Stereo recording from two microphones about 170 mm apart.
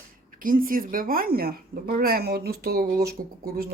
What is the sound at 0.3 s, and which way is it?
A woman's voice, 55° right (ahead or behind).